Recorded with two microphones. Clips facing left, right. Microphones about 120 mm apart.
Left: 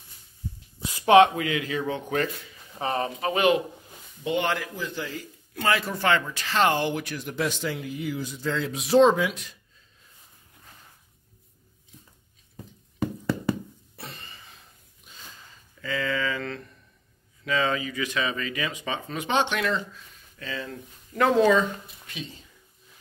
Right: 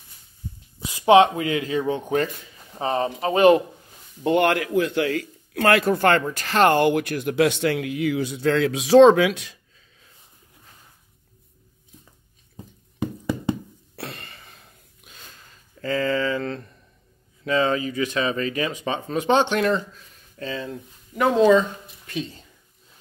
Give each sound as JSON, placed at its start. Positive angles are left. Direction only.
{"t": 0.9, "sound": "speech", "side_deg": -25}
{"t": 4.2, "sound": "a man's voice", "side_deg": -55}
{"t": 13.0, "sound": "music", "side_deg": -20}
{"t": 13.9, "sound": "a sound", "side_deg": -70}
{"t": 15.8, "sound": "speech", "side_deg": -40}